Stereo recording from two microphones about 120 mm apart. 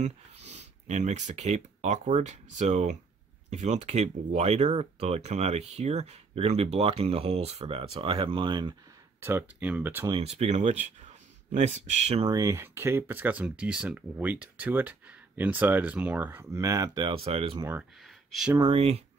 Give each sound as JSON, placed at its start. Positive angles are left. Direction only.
{"t": 0.0, "sound": "speech", "side_deg": -70}
{"t": 9.2, "sound": "speech", "side_deg": -20}
{"t": 10.2, "sound": "speech", "side_deg": -70}
{"t": 12.3, "sound": "speech", "side_deg": -30}
{"t": 16.5, "sound": "speech", "side_deg": -30}
{"t": 17.1, "sound": "speech", "side_deg": -55}
{"t": 18.7, "sound": "speech", "side_deg": -55}